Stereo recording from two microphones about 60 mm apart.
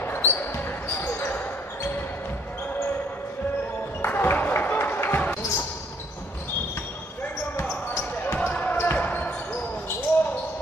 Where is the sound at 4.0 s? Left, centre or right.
Left.